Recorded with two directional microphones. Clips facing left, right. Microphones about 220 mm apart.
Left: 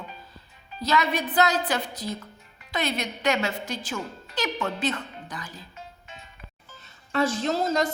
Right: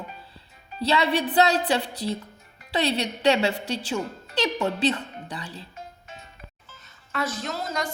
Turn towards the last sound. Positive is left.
turn(degrees=25)  # may be behind; listen again after turning